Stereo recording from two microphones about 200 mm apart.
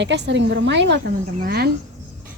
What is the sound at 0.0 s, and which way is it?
A woman's voice, 65° right (ahead or behind).